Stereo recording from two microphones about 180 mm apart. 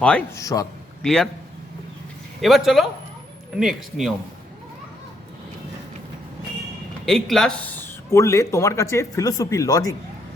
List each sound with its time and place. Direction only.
0.3 s speech: 15° left (ahead or behind)
1.0 s speech: 5° left (ahead or behind)
2.4 s speech: centre (ahead or behind)
7.0 s speech: centre (ahead or behind); by 9.9 s 20° left (ahead or behind)